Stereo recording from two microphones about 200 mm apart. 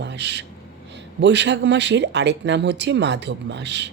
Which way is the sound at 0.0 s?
60° right (ahead or behind).